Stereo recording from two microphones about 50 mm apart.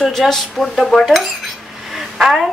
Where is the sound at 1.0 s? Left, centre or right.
Centre.